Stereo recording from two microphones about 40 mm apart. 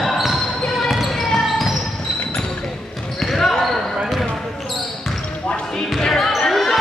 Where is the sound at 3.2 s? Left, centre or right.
Centre.